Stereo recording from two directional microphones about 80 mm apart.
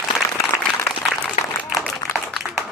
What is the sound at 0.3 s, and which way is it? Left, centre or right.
Applause, left.